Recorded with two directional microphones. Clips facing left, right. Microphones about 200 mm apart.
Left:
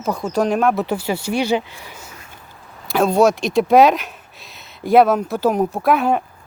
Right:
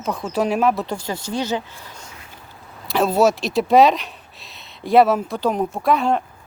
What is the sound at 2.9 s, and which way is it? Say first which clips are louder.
Speech: left 2 dB; centre (ahead or behind).